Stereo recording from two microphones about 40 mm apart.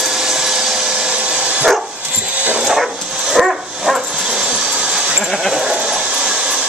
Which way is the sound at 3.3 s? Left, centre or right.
Centre.